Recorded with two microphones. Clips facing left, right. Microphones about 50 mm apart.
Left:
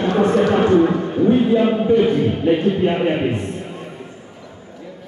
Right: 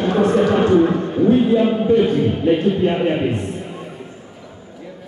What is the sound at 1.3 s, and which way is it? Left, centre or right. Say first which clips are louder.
Speech: right 1 dB; centre.